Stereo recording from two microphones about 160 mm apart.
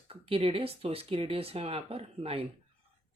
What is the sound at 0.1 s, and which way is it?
Speech, 35° right (ahead or behind).